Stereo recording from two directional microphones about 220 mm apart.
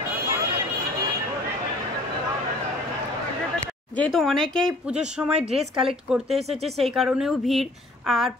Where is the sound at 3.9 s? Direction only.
5° left (ahead or behind).